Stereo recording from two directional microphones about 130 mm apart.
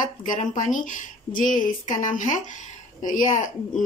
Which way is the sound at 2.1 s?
75° left (ahead or behind).